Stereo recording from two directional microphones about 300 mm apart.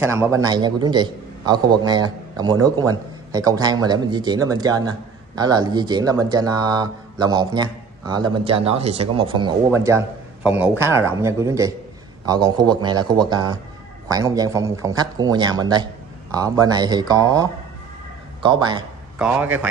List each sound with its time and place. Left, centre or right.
0.0 s a man's voice: centre